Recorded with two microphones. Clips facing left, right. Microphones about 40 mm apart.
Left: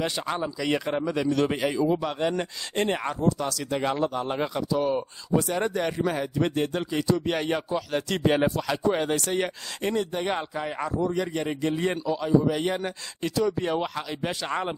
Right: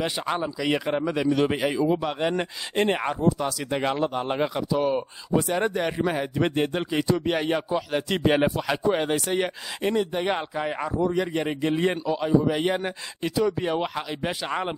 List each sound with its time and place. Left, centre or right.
0.0 s speech: centre
7.2 s speech: centre